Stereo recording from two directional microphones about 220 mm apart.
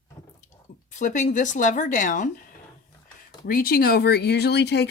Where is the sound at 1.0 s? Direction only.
35° left (ahead or behind).